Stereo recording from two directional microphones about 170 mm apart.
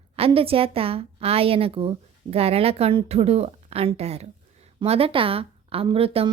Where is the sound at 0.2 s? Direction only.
35° right (ahead or behind).